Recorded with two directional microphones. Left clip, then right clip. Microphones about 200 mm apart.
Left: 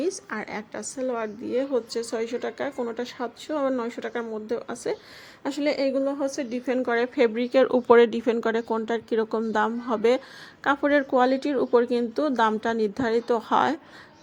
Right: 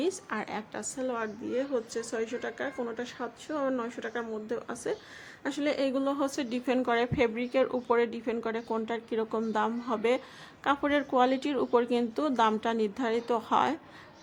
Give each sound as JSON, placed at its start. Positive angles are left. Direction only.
{"t": 0.3, "sound": "a woman's voice", "side_deg": 15}